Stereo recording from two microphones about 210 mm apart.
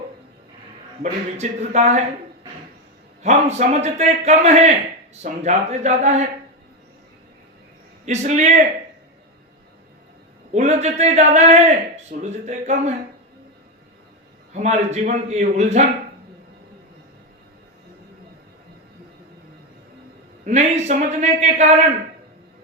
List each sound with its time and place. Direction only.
1.4 s a man's voice: 35° right (ahead or behind)
3.2 s a man's voice: 30° right (ahead or behind)
8.0 s a man's voice: 35° right (ahead or behind)
10.5 s a man's voice: 30° right (ahead or behind)
14.5 s a man's voice: 35° right (ahead or behind)
20.4 s a man's voice: 30° right (ahead or behind)